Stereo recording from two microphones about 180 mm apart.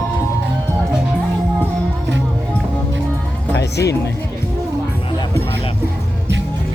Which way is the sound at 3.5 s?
70° left (ahead or behind).